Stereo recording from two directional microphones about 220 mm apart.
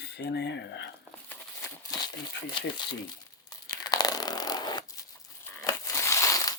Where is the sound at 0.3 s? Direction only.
50° left (ahead or behind).